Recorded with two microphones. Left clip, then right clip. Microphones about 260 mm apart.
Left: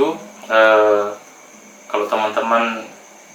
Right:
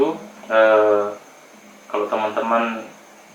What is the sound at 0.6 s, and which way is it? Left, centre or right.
A man's voice, centre.